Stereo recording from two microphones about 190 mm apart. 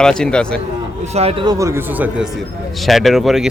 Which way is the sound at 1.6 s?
15° right (ahead or behind).